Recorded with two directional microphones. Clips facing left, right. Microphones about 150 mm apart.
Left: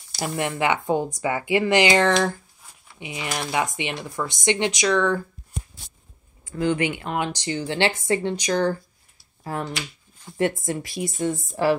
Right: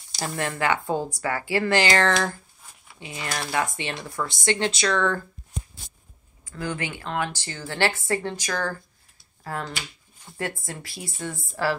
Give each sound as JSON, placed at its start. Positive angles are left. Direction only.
{"t": 0.2, "sound": "speech", "side_deg": 15}
{"t": 6.4, "sound": "speech", "side_deg": 20}